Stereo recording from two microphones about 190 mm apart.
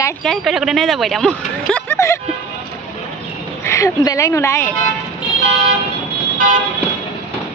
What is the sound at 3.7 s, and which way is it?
A woman's voice, 15° left (ahead or behind).